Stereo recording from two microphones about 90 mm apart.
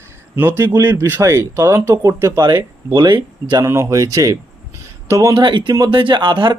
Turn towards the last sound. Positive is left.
turn(degrees=-55)  # may be behind; listen again after turning